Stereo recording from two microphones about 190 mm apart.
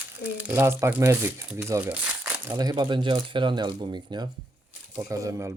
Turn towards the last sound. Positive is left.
turn(degrees=-15)  # may be behind; listen again after turning